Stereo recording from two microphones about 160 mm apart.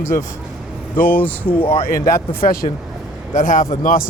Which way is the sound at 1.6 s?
35° left (ahead or behind).